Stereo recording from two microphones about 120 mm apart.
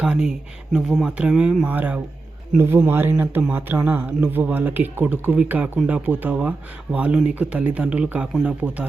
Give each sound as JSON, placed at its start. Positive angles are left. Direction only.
{"t": 0.0, "sound": "speech", "side_deg": -5}